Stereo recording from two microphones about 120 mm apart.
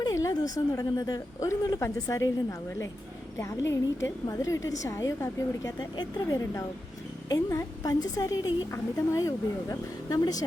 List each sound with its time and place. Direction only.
0.0 s a woman's voice: 30° left (ahead or behind)